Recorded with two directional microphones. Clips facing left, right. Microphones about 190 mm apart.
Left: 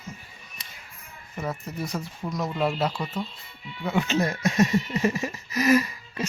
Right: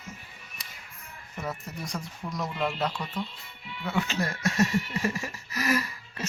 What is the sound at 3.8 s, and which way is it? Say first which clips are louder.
Speech: left 5 dB; 20° left (ahead or behind).